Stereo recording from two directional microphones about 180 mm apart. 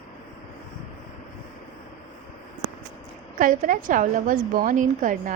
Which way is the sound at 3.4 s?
50° right (ahead or behind).